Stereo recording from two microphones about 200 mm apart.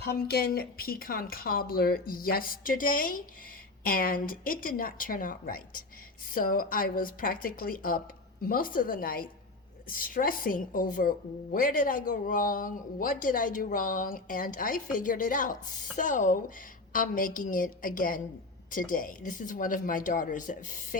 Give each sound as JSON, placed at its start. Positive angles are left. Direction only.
{"t": 0.1, "sound": "speech", "side_deg": 50}